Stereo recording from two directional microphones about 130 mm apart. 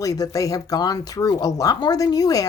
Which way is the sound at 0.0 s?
30° left (ahead or behind).